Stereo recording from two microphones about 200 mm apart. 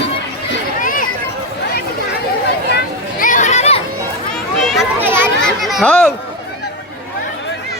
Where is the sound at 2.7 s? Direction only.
45° left (ahead or behind).